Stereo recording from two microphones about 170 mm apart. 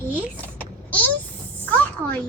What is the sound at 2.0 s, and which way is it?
Speech, 20° right (ahead or behind).